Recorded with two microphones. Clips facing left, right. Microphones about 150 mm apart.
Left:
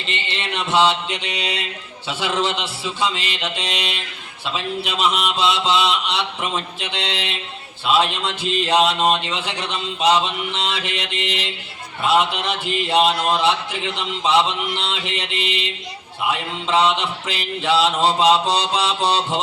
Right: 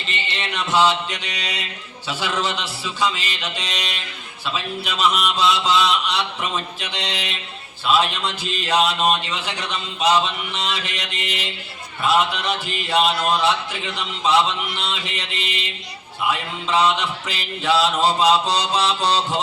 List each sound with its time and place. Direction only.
0.5 s a man's voice: 25° left (ahead or behind)